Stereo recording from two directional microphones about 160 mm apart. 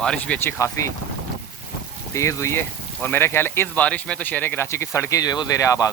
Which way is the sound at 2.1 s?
20° left (ahead or behind).